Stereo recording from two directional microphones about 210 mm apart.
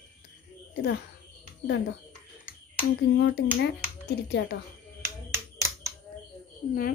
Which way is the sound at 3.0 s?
50° left (ahead or behind).